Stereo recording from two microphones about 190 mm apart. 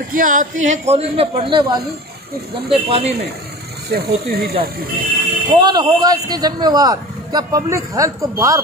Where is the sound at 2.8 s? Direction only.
30° right (ahead or behind).